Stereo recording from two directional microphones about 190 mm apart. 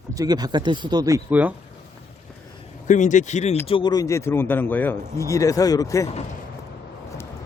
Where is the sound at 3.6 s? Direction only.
25° left (ahead or behind).